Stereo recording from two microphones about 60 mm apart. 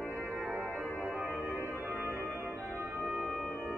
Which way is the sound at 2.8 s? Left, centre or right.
Right.